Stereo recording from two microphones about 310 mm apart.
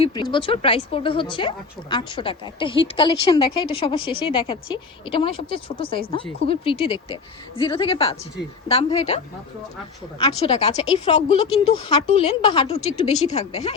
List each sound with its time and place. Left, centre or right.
0.0 s speech: centre